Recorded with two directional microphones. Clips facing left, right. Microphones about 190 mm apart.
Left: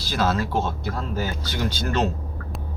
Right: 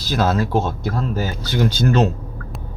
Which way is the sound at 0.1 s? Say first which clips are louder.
Right 5 dB; 45° right (ahead or behind).